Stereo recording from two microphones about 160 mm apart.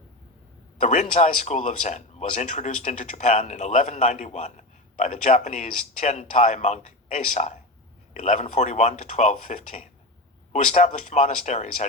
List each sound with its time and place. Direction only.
0.8 s speech: 45° left (ahead or behind)